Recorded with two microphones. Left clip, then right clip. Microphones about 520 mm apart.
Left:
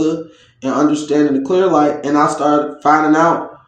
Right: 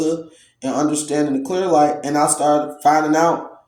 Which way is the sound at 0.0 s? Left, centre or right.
Right.